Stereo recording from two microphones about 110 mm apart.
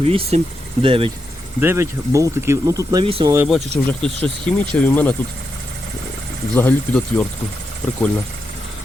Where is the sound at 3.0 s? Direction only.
55° right (ahead or behind).